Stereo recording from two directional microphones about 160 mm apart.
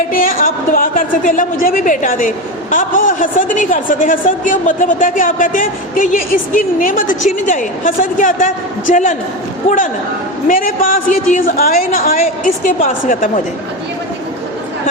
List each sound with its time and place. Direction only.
0.3 s a woman's voice: 65° left (ahead or behind); by 13.4 s 45° left (ahead or behind)